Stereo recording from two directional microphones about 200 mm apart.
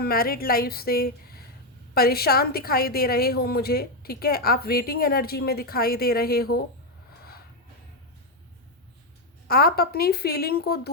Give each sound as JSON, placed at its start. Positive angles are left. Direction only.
{"t": 0.0, "sound": "a woman's voice", "side_deg": 50}
{"t": 9.5, "sound": "a woman's voice", "side_deg": 50}